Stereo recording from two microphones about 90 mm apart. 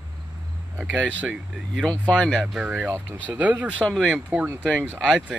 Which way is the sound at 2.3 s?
5° left (ahead or behind).